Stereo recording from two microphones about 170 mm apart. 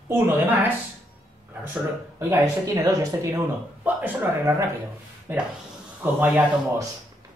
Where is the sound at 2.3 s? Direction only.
20° right (ahead or behind).